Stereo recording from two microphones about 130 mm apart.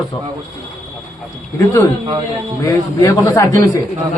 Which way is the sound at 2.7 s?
25° left (ahead or behind).